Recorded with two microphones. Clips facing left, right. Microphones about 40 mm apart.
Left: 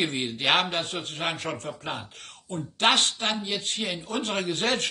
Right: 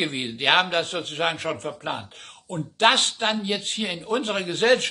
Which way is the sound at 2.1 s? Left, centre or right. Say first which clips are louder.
Right 2 dB; right.